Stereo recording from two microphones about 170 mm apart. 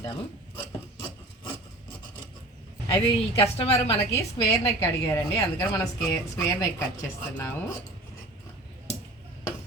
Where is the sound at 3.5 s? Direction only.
35° left (ahead or behind).